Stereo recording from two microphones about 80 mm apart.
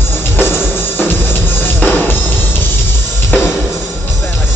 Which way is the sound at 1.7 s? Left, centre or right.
Left.